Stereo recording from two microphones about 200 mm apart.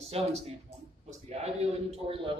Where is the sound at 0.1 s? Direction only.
30° right (ahead or behind).